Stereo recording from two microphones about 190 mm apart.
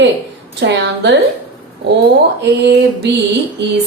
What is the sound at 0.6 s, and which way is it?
A woman's voice, 65° right (ahead or behind).